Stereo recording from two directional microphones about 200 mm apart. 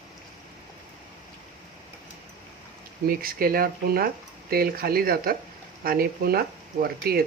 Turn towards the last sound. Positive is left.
turn(degrees=-50)  # may be behind; listen again after turning